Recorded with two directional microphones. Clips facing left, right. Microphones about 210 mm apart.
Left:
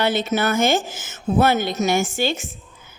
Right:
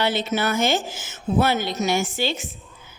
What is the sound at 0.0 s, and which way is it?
A woman's voice, 50° left (ahead or behind).